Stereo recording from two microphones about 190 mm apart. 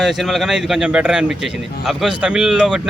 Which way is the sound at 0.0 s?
Centre (ahead or behind).